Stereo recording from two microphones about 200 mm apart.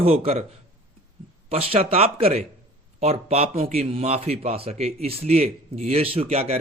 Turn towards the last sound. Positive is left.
turn(degrees=-30)  # may be behind; listen again after turning